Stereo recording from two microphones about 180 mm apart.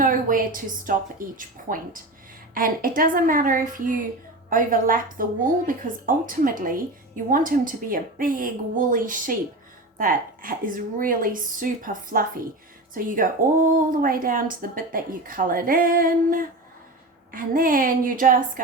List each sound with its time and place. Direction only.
0.0 s a woman's voice: 50° right (ahead or behind)